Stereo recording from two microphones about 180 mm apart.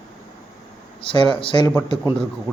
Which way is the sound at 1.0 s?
25° left (ahead or behind).